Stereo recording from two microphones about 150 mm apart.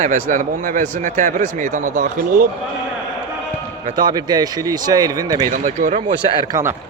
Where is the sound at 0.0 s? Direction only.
60° right (ahead or behind).